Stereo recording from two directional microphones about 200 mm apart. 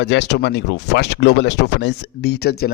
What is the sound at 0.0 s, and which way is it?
Speech, 60° left (ahead or behind).